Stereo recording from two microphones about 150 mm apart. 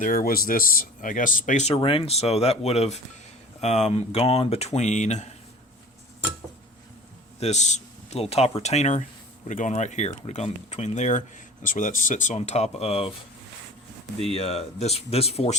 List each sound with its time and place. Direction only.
0.0 s speech: 65° left (ahead or behind); by 5.3 s 50° left (ahead or behind)
7.3 s speech: 50° left (ahead or behind)
11.6 s speech: 60° left (ahead or behind); by 13.1 s 40° left (ahead or behind)
14.3 s speech: 45° left (ahead or behind)